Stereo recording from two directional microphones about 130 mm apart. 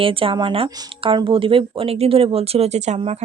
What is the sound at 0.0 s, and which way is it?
Speech, 45° right (ahead or behind).